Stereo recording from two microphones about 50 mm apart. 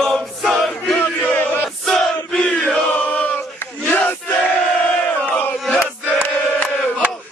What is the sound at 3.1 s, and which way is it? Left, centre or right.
Choir, left.